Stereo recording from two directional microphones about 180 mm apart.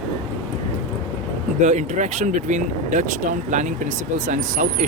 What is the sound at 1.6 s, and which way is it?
Speech, 40° right (ahead or behind).